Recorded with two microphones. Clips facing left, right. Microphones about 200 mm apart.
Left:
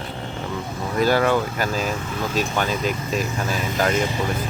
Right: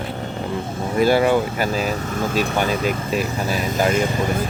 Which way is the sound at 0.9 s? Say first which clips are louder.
Right 3 dB; 10° right (ahead or behind).